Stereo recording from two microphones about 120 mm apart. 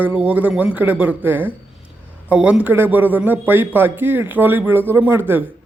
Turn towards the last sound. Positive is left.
turn(degrees=-20)  # may be behind; listen again after turning